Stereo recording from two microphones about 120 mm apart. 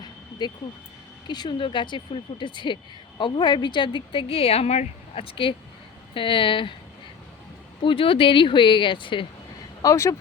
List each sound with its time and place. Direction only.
0.0 s vehicle: 40° left (ahead or behind)
1.3 s speech: 35° left (ahead or behind)
7.8 s speech: 45° left (ahead or behind)
9.8 s speech: 25° left (ahead or behind)